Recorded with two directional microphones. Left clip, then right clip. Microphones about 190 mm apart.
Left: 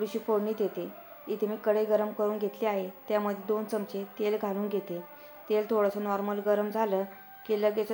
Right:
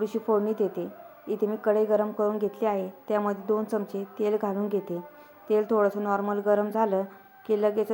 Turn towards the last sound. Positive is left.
turn(degrees=-30)  # may be behind; listen again after turning